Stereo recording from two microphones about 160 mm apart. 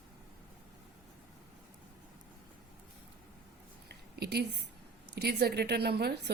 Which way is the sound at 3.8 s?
90° right.